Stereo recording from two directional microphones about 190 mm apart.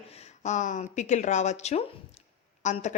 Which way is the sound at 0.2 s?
40° left (ahead or behind).